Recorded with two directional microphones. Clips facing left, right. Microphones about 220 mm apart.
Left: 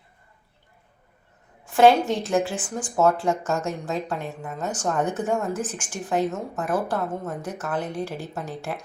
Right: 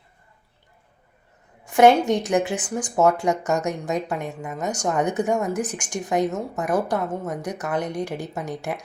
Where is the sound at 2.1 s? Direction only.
15° right (ahead or behind).